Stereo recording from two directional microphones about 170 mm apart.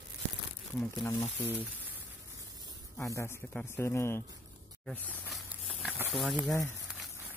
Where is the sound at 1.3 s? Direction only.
10° right (ahead or behind).